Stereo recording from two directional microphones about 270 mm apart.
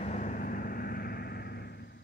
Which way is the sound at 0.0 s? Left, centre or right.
Left.